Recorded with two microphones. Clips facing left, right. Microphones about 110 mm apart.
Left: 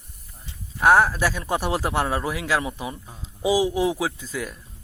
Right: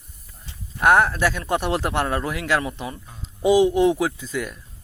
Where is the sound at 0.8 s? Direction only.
Centre (ahead or behind).